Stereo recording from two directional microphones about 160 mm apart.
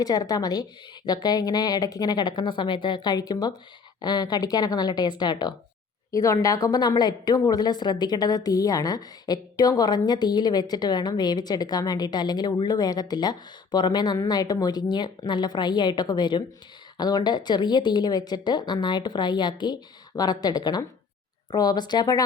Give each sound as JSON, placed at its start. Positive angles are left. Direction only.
{"t": 0.0, "sound": "speech", "side_deg": 25}